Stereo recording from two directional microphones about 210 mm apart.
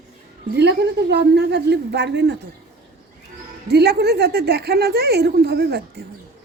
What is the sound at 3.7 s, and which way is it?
A woman's voice, 50° right (ahead or behind).